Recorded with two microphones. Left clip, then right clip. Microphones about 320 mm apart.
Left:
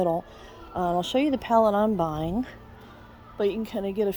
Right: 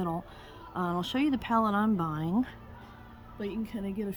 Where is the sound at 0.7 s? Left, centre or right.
Centre.